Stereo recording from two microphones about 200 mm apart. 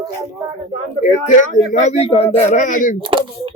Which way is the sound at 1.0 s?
40° left (ahead or behind).